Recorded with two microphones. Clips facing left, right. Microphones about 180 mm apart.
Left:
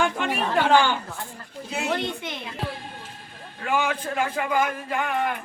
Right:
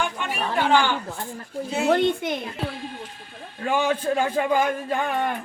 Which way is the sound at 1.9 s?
45° right (ahead or behind).